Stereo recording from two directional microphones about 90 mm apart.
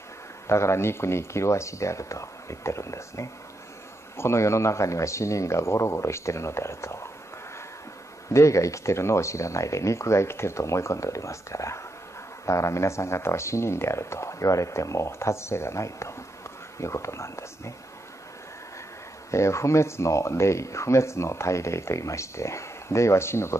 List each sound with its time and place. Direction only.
0.5 s speech: 30° left (ahead or behind)
8.3 s speech: 35° left (ahead or behind)
19.3 s speech: 35° left (ahead or behind)